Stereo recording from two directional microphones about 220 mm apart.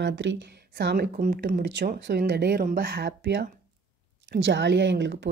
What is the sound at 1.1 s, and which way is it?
Speech, 40° right (ahead or behind).